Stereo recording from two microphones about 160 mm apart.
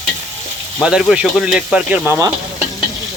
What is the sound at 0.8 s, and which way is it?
Speech, 5° right (ahead or behind).